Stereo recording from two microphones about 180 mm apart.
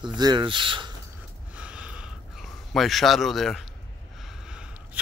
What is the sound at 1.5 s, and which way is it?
Gasp, 5° right (ahead or behind).